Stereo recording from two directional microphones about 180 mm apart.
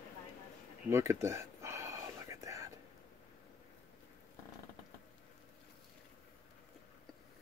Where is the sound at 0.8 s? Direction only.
15° right (ahead or behind).